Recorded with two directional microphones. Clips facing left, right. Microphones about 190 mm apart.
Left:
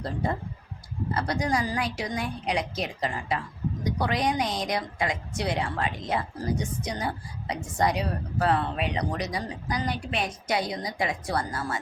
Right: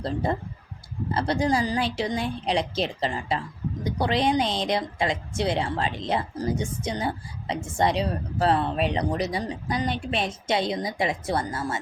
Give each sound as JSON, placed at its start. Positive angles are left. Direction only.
{"t": 0.0, "sound": "a woman's voice", "side_deg": -30}